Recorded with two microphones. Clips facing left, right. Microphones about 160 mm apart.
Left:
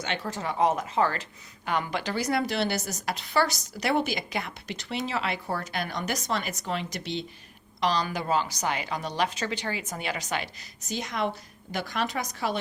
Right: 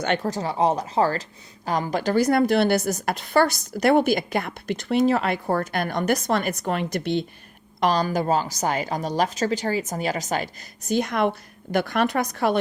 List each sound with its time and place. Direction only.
0.0 s a woman's voice: 50° right (ahead or behind)
0.3 s a woman's voice: 35° right (ahead or behind); by 12.5 s 60° right (ahead or behind)